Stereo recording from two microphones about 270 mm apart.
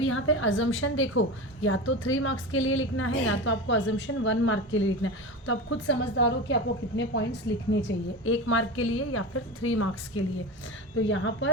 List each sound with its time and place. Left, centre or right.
0.0 s a woman's voice: left